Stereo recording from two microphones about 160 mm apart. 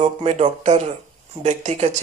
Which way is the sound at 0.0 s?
40° right (ahead or behind).